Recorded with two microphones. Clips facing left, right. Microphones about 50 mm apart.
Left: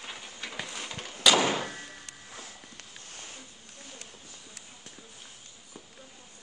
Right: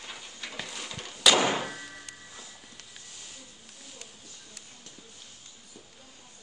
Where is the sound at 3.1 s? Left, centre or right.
Left.